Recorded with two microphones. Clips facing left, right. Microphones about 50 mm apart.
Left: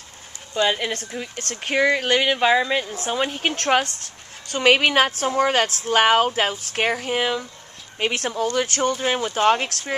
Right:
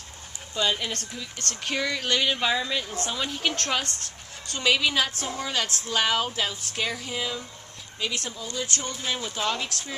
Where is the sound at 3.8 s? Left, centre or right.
Right.